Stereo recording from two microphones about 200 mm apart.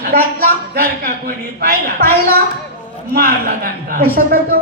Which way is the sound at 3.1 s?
45° right (ahead or behind).